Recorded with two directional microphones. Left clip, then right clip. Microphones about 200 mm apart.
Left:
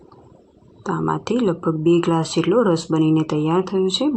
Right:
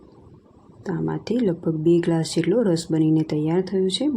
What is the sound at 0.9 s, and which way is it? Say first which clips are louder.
Speech: left 5 dB; 15° right (ahead or behind).